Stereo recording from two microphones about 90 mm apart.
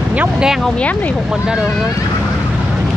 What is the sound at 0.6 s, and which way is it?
Speech, 15° left (ahead or behind).